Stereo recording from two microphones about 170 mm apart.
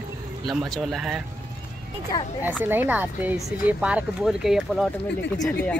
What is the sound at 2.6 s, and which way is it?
Speech, 10° right (ahead or behind).